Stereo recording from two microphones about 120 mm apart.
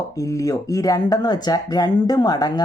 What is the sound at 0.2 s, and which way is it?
Speech, 25° left (ahead or behind).